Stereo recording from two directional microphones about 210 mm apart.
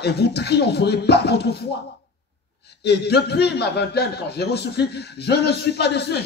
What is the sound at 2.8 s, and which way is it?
A man's voice, 50° left (ahead or behind).